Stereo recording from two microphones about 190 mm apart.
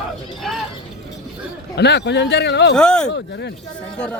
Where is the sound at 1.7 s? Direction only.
60° left (ahead or behind).